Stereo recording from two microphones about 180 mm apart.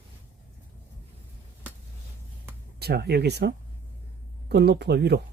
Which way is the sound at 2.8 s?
65° right (ahead or behind).